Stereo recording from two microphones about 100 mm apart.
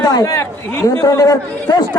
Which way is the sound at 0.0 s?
40° left (ahead or behind).